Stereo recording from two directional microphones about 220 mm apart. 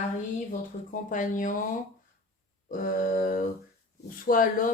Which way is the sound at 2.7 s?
40° left (ahead or behind).